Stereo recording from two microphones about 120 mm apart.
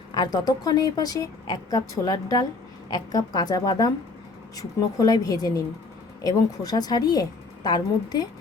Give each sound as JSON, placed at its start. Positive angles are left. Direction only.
{"t": 0.1, "sound": "a woman's voice", "side_deg": 35}